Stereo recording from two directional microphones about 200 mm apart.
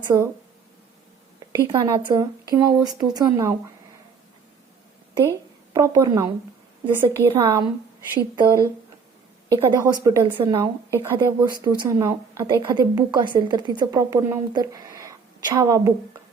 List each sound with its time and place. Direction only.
0.1 s a woman's voice: 10° right (ahead or behind)
1.5 s speech: 20° right (ahead or behind)
5.7 s a woman's voice: 15° right (ahead or behind)
9.5 s a woman's voice: 15° right (ahead or behind)